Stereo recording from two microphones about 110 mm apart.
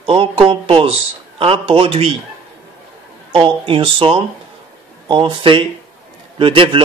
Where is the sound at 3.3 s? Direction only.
50° right (ahead or behind).